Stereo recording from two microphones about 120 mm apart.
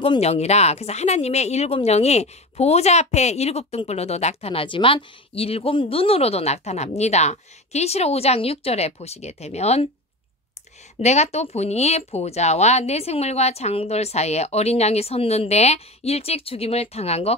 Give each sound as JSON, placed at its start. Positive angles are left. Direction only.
{"t": 0.0, "sound": "speech", "side_deg": 55}
{"t": 11.0, "sound": "speech", "side_deg": 65}